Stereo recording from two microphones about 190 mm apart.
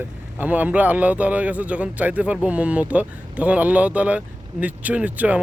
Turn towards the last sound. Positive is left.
turn(degrees=-5)  # may be behind; listen again after turning